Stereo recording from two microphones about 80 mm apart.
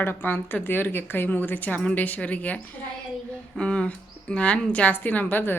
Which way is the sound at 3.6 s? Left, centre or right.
Centre.